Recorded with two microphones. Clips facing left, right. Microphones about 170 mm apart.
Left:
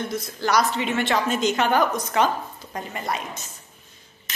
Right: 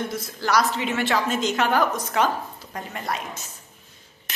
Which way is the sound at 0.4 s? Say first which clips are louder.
Even; centre (ahead or behind).